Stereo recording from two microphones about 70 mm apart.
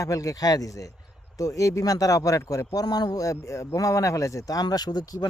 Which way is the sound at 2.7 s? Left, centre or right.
Left.